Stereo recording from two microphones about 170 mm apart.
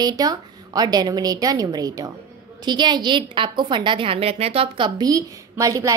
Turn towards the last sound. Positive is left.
turn(degrees=-20)  # may be behind; listen again after turning